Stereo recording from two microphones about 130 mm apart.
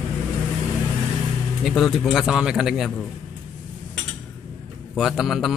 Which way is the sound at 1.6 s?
Centre (ahead or behind).